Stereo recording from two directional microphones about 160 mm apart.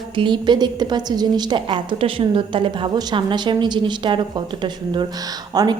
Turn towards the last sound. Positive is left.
turn(degrees=-25)  # may be behind; listen again after turning